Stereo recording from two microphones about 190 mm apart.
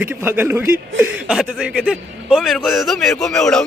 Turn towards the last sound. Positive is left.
turn(degrees=5)  # may be behind; listen again after turning